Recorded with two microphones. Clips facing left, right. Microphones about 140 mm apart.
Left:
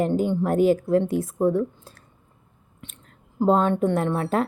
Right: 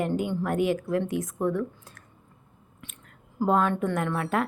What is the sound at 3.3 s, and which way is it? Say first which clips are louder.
A woman's voice: left 4 dB; 25° left (ahead or behind).